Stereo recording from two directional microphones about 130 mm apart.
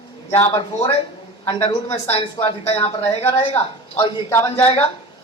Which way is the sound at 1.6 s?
55° left (ahead or behind).